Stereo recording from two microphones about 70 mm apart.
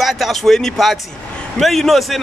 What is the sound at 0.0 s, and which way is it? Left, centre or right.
Speech, centre.